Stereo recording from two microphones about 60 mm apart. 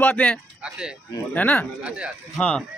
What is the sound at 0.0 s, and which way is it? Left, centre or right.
Speech, left.